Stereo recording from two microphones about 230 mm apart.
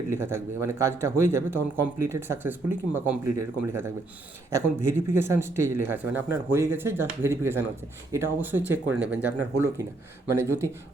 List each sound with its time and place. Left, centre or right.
0.1 s speech: centre